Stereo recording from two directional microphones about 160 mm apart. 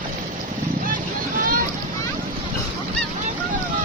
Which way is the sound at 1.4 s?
60° right (ahead or behind).